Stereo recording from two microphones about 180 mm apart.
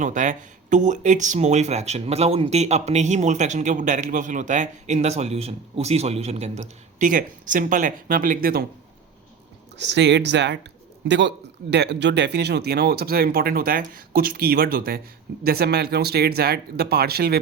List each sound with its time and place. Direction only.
0.0 s speech: 45° right (ahead or behind)
9.7 s speech: 75° right (ahead or behind); by 17.3 s 60° right (ahead or behind)